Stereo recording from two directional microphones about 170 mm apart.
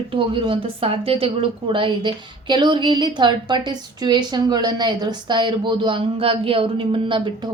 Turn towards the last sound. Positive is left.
turn(degrees=-30)  # may be behind; listen again after turning